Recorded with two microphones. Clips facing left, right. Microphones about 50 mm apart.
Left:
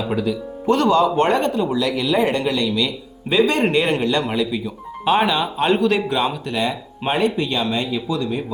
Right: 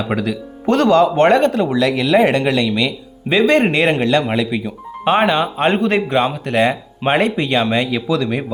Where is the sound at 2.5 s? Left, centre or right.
Right.